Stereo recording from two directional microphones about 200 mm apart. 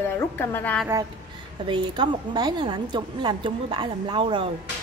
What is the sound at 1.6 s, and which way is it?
A woman's voice, 25° right (ahead or behind).